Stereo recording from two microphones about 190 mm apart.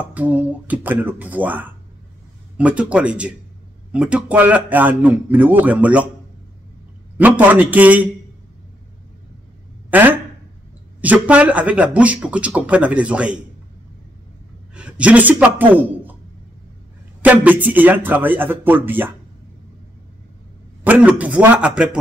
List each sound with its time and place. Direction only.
0.1 s speech: 10° right (ahead or behind)
7.2 s speech: 10° right (ahead or behind)
9.8 s a sound: 10° right (ahead or behind)
11.0 s speech: 10° right (ahead or behind)
14.7 s a man's voice: 5° right (ahead or behind)
17.2 s speech: 10° right (ahead or behind)
20.8 s speech: 10° right (ahead or behind)